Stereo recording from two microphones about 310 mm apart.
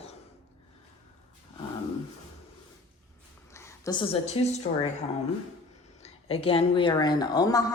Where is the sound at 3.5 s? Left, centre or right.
Centre.